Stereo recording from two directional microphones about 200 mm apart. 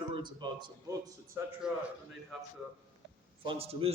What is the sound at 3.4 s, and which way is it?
Speech, 25° right (ahead or behind).